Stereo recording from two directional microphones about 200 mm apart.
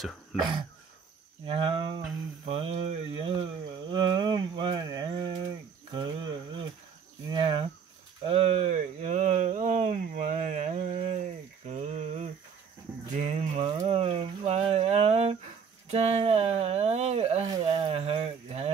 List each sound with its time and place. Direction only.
0.3 s speech: centre (ahead or behind)
1.4 s speech: 25° right (ahead or behind)
5.9 s cricket: 25° right (ahead or behind)
7.2 s speech: 25° right (ahead or behind)
8.3 s a sound: 30° right (ahead or behind)